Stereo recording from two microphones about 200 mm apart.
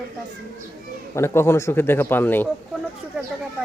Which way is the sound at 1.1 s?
10° left (ahead or behind).